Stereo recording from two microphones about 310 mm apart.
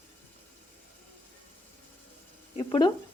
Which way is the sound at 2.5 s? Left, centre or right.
Centre.